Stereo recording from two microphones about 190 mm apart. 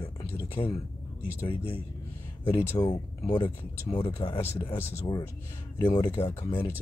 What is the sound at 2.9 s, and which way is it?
Speech, 25° left (ahead or behind).